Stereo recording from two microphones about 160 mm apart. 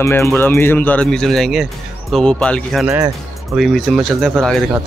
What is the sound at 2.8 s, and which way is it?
Speech, 15° right (ahead or behind).